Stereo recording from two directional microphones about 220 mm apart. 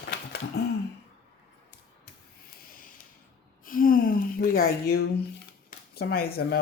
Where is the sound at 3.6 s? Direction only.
40° left (ahead or behind).